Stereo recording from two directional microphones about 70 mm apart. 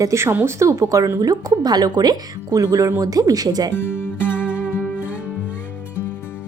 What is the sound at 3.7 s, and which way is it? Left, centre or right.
Speech, left.